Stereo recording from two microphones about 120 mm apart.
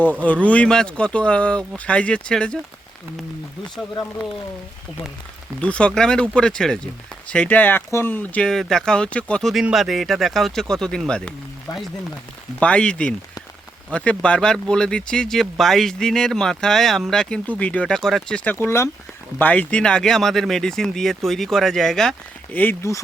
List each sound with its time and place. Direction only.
0.1 s speech: 15° left (ahead or behind)
5.5 s speech: 10° left (ahead or behind)
18.5 s speech: 20° left (ahead or behind)
19.4 s speech: 10° left (ahead or behind)
22.5 s speech: 15° left (ahead or behind)